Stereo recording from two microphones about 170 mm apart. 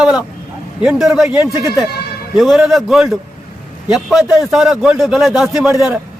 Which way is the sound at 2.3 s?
5° right (ahead or behind).